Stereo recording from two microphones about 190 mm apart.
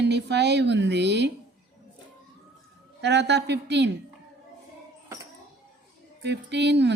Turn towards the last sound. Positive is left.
turn(degrees=-65)  # may be behind; listen again after turning